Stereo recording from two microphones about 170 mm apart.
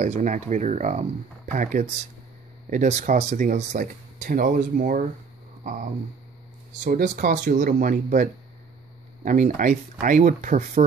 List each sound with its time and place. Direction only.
0.0 s speech: 45° right (ahead or behind)
6.8 s speech: 50° right (ahead or behind)